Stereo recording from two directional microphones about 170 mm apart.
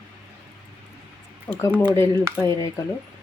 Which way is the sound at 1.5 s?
10° left (ahead or behind).